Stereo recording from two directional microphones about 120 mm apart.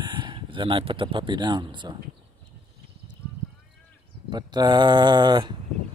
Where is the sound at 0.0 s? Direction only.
40° right (ahead or behind).